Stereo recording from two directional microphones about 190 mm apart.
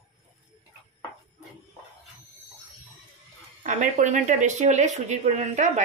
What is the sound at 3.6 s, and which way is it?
Speech, 40° right (ahead or behind).